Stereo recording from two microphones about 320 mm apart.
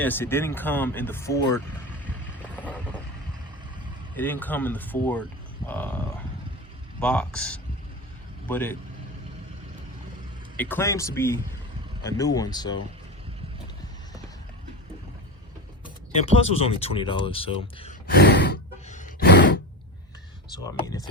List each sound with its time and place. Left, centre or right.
0.0 s speech: centre
2.6 s vehicle: centre
4.1 s speech: centre
7.0 s speech: centre
10.6 s speech: centre
16.2 s speech: centre
20.7 s speech: centre